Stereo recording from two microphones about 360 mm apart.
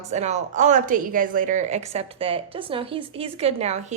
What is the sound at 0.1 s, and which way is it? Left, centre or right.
A woman's voice, centre.